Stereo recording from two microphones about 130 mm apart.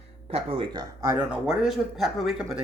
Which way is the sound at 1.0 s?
15° right (ahead or behind).